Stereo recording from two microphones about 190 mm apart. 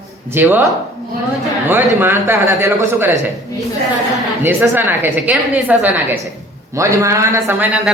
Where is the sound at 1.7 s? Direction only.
10° right (ahead or behind).